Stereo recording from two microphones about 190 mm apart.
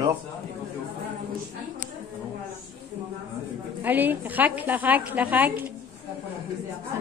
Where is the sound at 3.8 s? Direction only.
10° right (ahead or behind).